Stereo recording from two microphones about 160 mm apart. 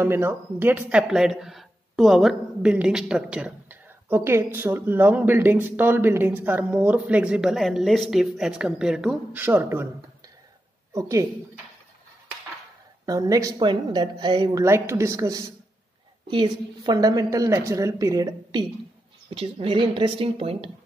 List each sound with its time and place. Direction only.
0.0 s speech: 15° right (ahead or behind)
10.9 s a woman's voice: 20° right (ahead or behind)
13.0 s a woman's voice: 20° right (ahead or behind); by 20.7 s 35° right (ahead or behind)